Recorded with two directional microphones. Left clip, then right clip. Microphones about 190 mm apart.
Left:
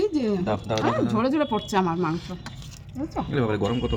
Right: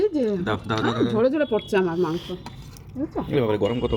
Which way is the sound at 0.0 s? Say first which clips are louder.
Right 2 dB; 15° left (ahead or behind).